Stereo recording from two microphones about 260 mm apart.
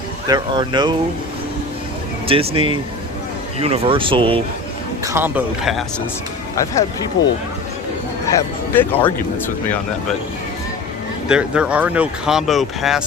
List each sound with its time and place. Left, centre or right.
0.3 s a man's voice: centre
2.2 s speech: right
5.0 s a man's voice: centre
7.2 s speech: left
8.3 s speech: centre
11.3 s speech: centre